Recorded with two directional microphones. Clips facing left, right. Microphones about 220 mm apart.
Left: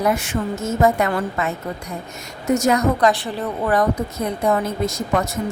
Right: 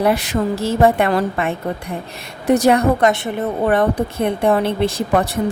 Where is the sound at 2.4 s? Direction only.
35° right (ahead or behind).